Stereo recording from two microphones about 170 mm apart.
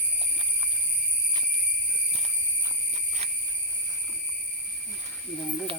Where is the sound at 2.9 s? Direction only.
40° right (ahead or behind).